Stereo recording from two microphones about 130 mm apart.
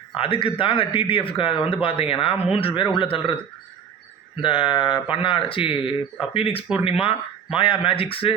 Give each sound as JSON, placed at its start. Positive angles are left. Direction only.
{"t": 0.2, "sound": "speech", "side_deg": 45}
{"t": 4.4, "sound": "a man's voice", "side_deg": 45}